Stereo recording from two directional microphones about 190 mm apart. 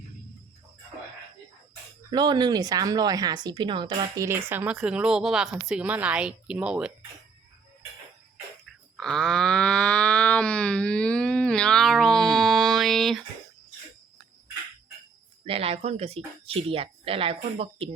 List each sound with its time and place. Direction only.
2.0 s speech: 20° right (ahead or behind); by 6.9 s 5° right (ahead or behind)
8.6 s a sound: centre (ahead or behind)
15.4 s speech: 30° right (ahead or behind)